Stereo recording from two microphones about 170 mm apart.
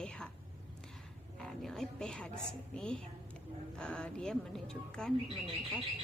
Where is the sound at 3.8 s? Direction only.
5° left (ahead or behind).